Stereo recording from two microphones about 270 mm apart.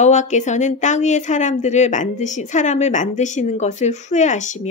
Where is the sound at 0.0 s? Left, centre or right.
Left.